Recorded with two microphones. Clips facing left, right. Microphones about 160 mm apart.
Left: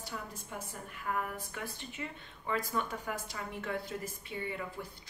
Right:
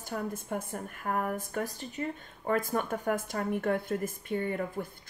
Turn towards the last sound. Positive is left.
turn(degrees=-50)  # may be behind; listen again after turning